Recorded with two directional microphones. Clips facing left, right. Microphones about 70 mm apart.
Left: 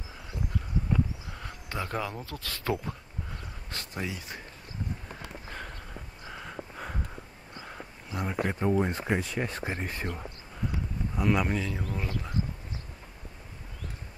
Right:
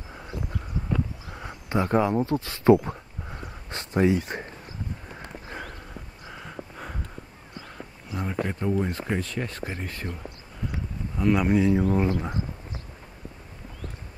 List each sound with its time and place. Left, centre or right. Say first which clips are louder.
1.3 s a sound: right 9 dB; centre
4.2 s speech: right 9 dB; right
5.5 s a sound: right 5 dB; centre
7.6 s speech: right 1 dB; centre
11.1 s speech: right 4 dB; centre
11.5 s speech: right 12 dB; centre